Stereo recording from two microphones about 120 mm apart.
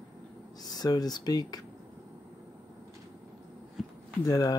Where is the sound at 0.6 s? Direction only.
35° left (ahead or behind).